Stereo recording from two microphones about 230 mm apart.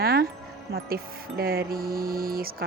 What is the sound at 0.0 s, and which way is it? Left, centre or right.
Music, right.